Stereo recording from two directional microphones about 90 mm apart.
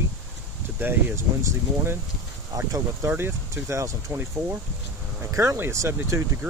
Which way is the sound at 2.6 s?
30° right (ahead or behind).